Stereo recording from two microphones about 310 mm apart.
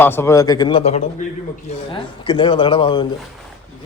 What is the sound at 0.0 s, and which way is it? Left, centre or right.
Speech, centre.